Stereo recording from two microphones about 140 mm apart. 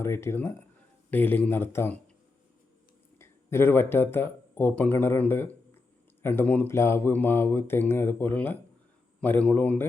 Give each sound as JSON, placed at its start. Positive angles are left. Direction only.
{"t": 0.0, "sound": "speech", "side_deg": 20}
{"t": 3.2, "sound": "speech", "side_deg": 15}